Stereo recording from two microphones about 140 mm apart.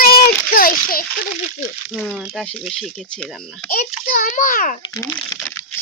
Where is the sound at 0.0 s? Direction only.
90° left.